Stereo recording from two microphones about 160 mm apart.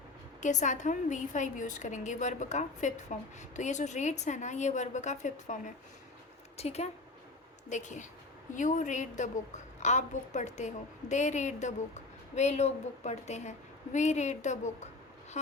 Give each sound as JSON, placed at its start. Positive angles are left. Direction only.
{"t": 0.4, "sound": "a woman's voice", "side_deg": 50}